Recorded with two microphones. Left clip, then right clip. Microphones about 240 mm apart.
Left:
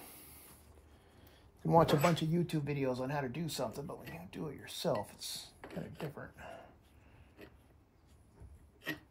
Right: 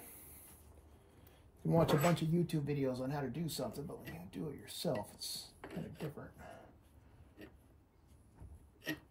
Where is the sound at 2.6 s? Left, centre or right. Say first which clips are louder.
Left 2 dB; centre.